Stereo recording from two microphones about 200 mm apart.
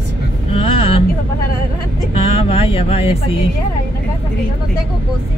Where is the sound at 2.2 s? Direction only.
30° left (ahead or behind).